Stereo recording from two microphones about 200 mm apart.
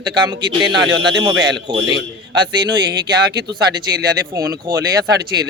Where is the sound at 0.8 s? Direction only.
65° right (ahead or behind).